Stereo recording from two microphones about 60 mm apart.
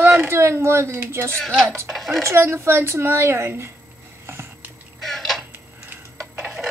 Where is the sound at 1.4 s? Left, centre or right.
Centre.